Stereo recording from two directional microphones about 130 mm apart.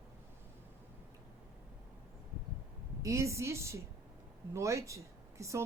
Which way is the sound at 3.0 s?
25° right (ahead or behind).